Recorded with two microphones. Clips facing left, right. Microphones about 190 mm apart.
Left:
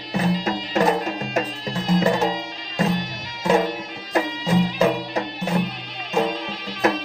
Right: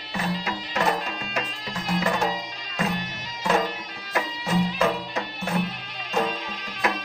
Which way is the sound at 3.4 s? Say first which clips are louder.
Left 5 dB; 25° left (ahead or behind).